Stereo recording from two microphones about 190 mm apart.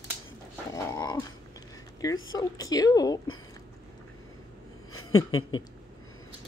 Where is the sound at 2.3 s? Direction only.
20° left (ahead or behind).